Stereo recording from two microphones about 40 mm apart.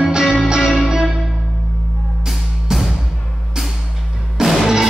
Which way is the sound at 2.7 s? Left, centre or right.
Centre.